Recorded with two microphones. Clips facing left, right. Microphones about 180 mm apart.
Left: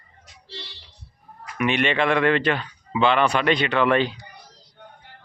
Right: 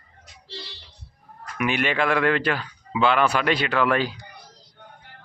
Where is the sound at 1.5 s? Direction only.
5° right (ahead or behind).